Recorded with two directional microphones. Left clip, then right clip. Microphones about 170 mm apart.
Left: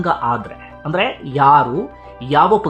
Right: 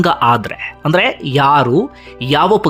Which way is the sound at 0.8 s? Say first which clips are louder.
Right 5 dB; 20° right (ahead or behind).